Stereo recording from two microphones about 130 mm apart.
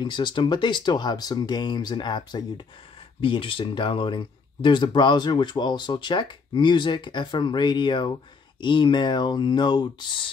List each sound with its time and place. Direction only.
0.0 s speech: 35° left (ahead or behind)